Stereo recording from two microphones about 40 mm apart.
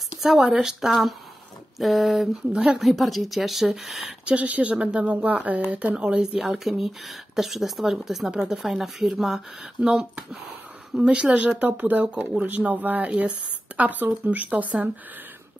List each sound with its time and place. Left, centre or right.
0.2 s a woman's voice: centre
2.5 s speech: right
2.8 s speech: centre
4.3 s a woman's voice: right; by 9.4 s centre
11.0 s speech: right